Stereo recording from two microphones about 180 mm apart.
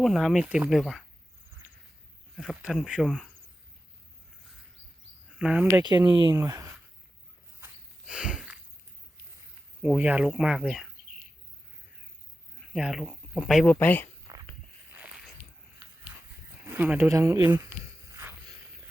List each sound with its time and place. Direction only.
0.0 s speech: centre (ahead or behind)
2.3 s speech: centre (ahead or behind)
5.4 s speech: 5° right (ahead or behind)
5.7 s speech: 25° right (ahead or behind)
8.0 s a sound: 5° right (ahead or behind)
9.8 s speech: 5° right (ahead or behind)
12.7 s speech: centre (ahead or behind)
13.7 s speech: 10° left (ahead or behind)
14.3 s a sound: 20° right (ahead or behind)
14.9 s a sound: 5° right (ahead or behind)
16.6 s speech: 10° right (ahead or behind)
18.2 s a sound: 15° right (ahead or behind)